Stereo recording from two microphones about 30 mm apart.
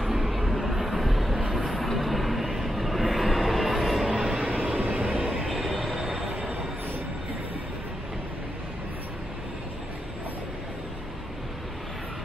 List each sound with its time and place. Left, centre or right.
0.1 s vehicle: centre
4.4 s vehicle: right
4.7 s vehicle: right
5.5 s train: centre
5.9 s train: centre